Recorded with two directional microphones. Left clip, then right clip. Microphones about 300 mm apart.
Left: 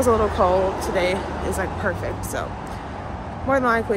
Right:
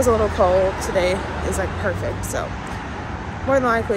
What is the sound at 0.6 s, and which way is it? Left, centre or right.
Speech, left.